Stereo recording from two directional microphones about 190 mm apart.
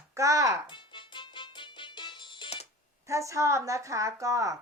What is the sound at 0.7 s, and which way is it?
Music, 25° left (ahead or behind).